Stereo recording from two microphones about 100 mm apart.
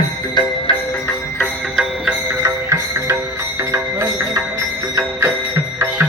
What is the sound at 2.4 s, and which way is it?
Music, 25° right (ahead or behind).